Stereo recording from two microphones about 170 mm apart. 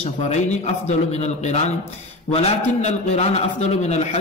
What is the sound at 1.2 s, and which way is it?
A man's voice, 40° left (ahead or behind).